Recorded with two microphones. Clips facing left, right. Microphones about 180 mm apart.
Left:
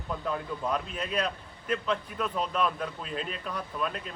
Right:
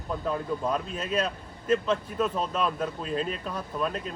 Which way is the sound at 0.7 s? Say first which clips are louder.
Right 2 dB; 40° right (ahead or behind).